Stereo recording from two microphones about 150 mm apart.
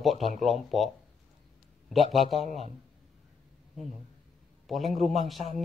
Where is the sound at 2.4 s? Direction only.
45° right (ahead or behind).